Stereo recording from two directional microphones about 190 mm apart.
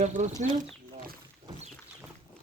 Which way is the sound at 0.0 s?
40° right (ahead or behind).